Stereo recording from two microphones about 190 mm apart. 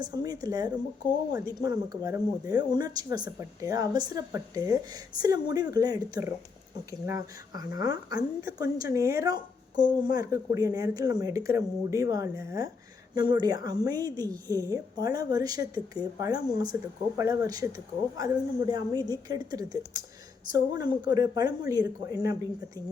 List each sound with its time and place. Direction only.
0.0 s speech: 20° right (ahead or behind)